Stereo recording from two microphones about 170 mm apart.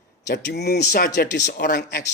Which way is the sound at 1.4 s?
50° left (ahead or behind).